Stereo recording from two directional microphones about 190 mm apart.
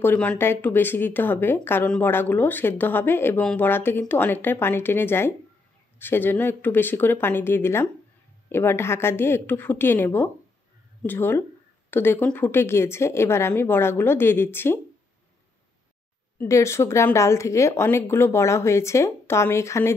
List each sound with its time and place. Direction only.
0.0 s speech: 10° left (ahead or behind)
16.3 s speech: 15° left (ahead or behind)